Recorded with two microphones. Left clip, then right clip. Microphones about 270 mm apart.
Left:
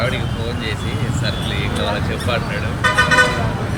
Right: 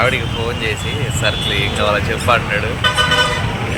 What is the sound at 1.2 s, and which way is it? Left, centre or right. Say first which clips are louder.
Speech: right 8 dB; centre.